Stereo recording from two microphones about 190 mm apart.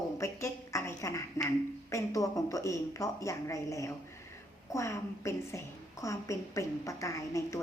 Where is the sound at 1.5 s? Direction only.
15° left (ahead or behind).